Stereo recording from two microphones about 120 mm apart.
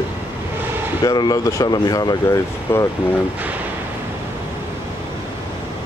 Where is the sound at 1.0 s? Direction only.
35° left (ahead or behind).